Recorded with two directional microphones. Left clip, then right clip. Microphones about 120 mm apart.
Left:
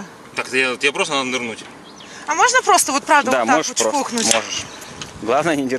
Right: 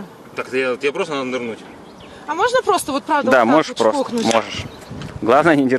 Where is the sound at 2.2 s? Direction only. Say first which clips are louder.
Left 3 dB; 50° left (ahead or behind).